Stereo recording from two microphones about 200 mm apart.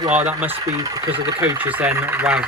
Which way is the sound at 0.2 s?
10° right (ahead or behind).